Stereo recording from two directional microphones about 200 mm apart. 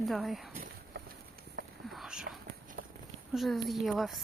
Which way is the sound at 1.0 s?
55° right (ahead or behind).